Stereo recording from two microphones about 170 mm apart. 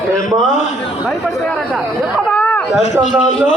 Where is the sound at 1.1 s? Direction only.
5° left (ahead or behind).